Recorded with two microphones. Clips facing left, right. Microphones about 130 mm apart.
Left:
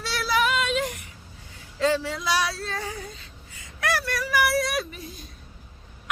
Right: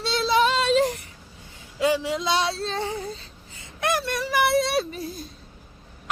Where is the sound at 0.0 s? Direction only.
25° right (ahead or behind).